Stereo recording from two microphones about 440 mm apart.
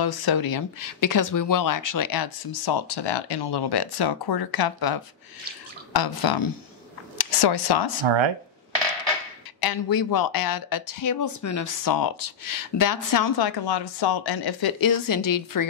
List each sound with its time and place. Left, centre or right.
0.0 s speech: left
8.0 s speech: right
9.6 s speech: left